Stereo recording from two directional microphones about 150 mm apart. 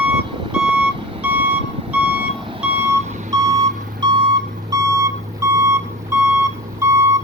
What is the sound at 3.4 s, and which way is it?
Reversing beeps, 25° right (ahead or behind).